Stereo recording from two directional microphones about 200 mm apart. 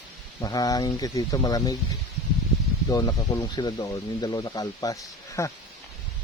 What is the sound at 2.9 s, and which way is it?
Speech, 20° left (ahead or behind).